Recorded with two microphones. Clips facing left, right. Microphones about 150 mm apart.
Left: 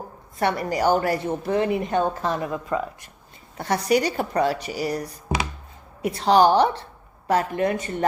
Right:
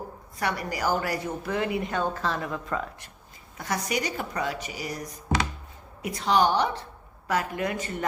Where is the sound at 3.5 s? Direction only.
30° left (ahead or behind).